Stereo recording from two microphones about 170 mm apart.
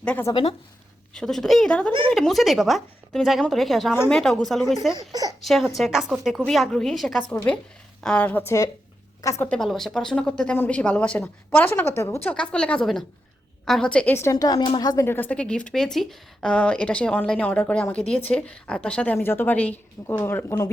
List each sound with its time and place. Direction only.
0.0 s a woman's voice: 10° left (ahead or behind)
1.9 s a woman's voice: 30° right (ahead or behind)
2.1 s a woman's voice: centre (ahead or behind)
3.9 s speech: 15° left (ahead or behind)
4.2 s a woman's voice: centre (ahead or behind)
4.9 s a woman's voice: 20° right (ahead or behind)
5.4 s a woman's voice: centre (ahead or behind)
9.6 s speech: centre (ahead or behind)